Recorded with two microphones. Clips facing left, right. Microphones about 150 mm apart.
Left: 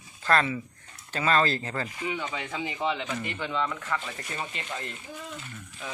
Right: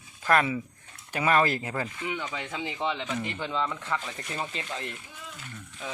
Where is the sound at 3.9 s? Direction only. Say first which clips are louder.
Right 1 dB; 15° right (ahead or behind).